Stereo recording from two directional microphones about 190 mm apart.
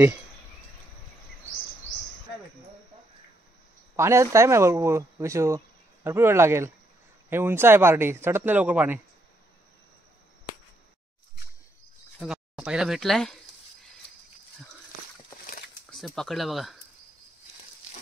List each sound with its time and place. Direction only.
3.9 s speech: 15° right (ahead or behind)
12.2 s speech: 5° right (ahead or behind)
15.4 s a sound: 50° left (ahead or behind)
15.9 s speech: centre (ahead or behind)